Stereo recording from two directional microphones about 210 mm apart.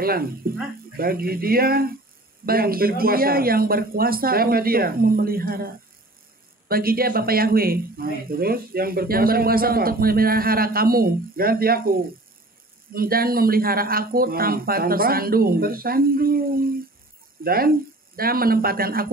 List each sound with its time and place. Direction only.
0.0 s speech: 45° right (ahead or behind)
6.7 s speech: 45° right (ahead or behind)